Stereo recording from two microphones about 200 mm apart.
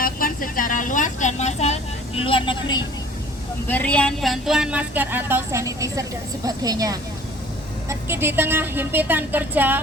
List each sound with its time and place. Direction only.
0.0 s vehicle: 45° left (ahead or behind); by 2.8 s 25° left (ahead or behind)
3.7 s speech: 5° left (ahead or behind); by 9.8 s 10° right (ahead or behind)